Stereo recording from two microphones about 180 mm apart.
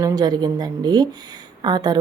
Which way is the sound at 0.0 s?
20° right (ahead or behind).